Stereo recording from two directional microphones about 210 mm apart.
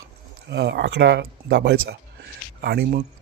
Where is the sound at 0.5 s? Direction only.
55° right (ahead or behind).